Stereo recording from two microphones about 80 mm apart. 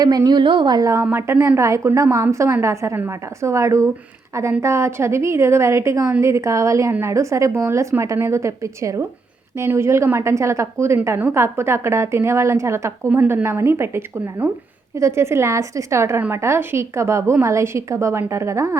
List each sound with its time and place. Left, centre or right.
0.0 s a woman's voice: right
0.4 s speech: right
0.8 s a woman's voice: right
1.1 s a woman's voice: right